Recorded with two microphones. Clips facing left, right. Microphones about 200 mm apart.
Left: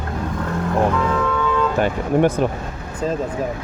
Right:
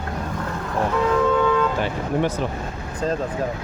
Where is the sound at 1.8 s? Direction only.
50° left (ahead or behind).